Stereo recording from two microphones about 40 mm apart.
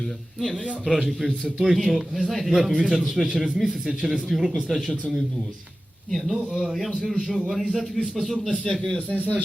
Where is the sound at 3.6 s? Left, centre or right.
Centre.